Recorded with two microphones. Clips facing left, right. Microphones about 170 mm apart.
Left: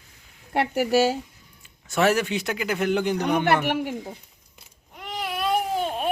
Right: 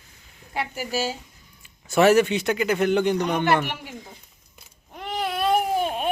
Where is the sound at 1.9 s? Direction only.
5° right (ahead or behind).